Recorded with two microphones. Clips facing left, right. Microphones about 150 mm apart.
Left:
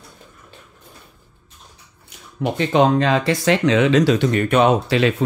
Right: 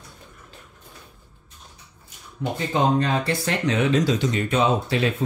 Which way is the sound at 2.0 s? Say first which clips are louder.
Left 5 dB; 80° left.